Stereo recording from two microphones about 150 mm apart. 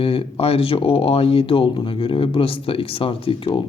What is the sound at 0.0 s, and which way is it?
A man's voice, 40° left (ahead or behind).